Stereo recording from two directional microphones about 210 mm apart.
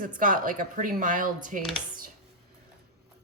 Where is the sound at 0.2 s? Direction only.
40° right (ahead or behind).